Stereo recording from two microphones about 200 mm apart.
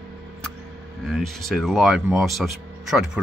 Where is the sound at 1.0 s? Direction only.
Centre (ahead or behind).